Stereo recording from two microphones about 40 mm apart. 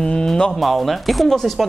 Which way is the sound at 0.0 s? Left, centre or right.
Centre.